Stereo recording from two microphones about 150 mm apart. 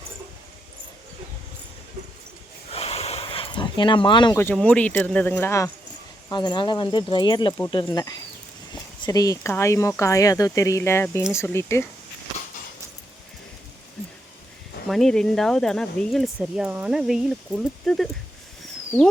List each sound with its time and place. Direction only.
2.7 s a sound: 40° left (ahead or behind)
4.5 s speech: 10° left (ahead or behind)
6.3 s speech: 30° left (ahead or behind)
14.8 s speech: centre (ahead or behind)